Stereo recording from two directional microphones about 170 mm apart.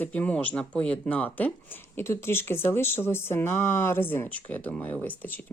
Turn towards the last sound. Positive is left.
turn(degrees=10)  # may be behind; listen again after turning